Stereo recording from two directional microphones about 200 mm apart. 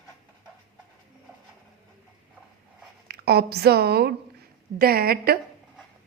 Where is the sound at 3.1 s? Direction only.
55° right (ahead or behind).